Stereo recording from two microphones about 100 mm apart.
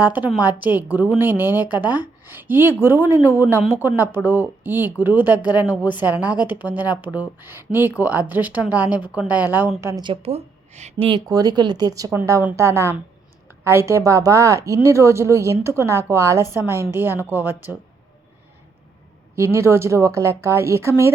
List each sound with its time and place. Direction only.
0.0 s a woman's voice: 20° right (ahead or behind)
11.3 s a woman's voice: 40° right (ahead or behind); by 17.7 s 20° right (ahead or behind)
19.4 s speech: 30° right (ahead or behind)